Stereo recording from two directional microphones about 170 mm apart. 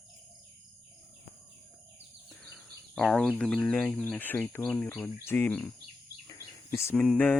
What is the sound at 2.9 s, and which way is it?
Bird, centre (ahead or behind).